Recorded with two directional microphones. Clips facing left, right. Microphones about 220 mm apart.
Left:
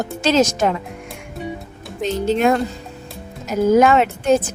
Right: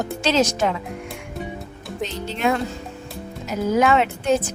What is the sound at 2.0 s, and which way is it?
A woman's voice, 45° left (ahead or behind).